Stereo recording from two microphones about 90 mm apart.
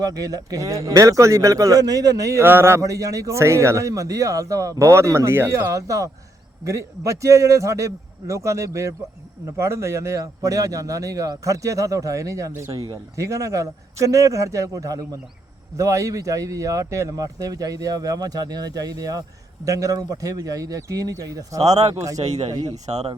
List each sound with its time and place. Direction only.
0.0 s a man's voice: 45° right (ahead or behind)
2.4 s a man's voice: 25° right (ahead or behind)